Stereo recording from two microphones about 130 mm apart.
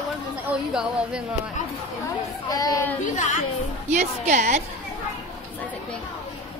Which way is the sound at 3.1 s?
70° left (ahead or behind).